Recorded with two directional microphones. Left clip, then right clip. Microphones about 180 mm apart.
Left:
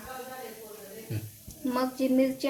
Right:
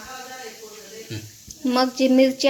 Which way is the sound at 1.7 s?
45° right (ahead or behind).